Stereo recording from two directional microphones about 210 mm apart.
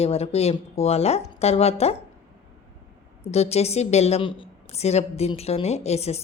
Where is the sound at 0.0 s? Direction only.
30° left (ahead or behind).